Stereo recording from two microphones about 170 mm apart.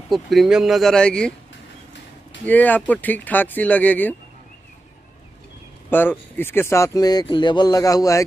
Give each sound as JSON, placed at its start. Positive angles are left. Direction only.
{"t": 0.1, "sound": "speech", "side_deg": 0}
{"t": 2.4, "sound": "speech", "side_deg": 10}
{"t": 5.9, "sound": "speech", "side_deg": 10}